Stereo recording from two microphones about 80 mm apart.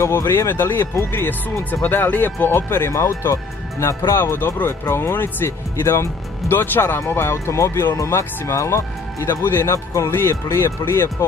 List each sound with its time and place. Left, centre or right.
0.1 s speech: left
2.9 s speech: left
4.2 s speech: left